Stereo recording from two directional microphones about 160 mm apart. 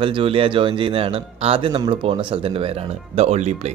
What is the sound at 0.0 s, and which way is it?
Speech, 35° right (ahead or behind).